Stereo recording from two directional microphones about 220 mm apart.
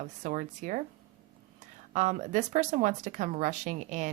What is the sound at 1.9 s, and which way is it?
Speech, 35° right (ahead or behind).